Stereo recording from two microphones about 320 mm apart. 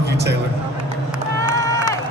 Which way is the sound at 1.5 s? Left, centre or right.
Centre.